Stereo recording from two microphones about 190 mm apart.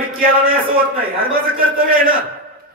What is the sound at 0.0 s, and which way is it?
A man's voice, 50° right (ahead or behind).